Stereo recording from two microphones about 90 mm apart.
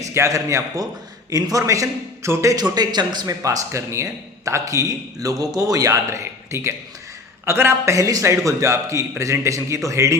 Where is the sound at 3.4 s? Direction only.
35° right (ahead or behind).